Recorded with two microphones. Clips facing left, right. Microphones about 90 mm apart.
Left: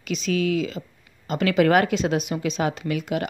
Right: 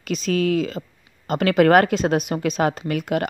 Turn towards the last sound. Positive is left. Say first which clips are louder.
# right 3 dB
turn(degrees=-50)  # may be behind; listen again after turning